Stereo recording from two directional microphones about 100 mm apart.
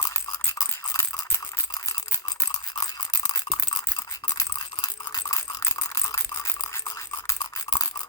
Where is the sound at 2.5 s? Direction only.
40° left (ahead or behind).